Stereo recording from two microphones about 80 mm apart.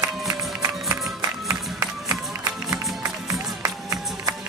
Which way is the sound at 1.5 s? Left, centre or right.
Right.